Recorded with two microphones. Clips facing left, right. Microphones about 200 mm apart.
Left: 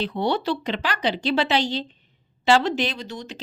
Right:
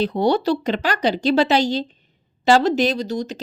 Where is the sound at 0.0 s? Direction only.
40° right (ahead or behind).